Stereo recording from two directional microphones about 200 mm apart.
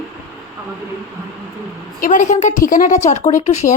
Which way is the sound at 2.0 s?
40° left (ahead or behind).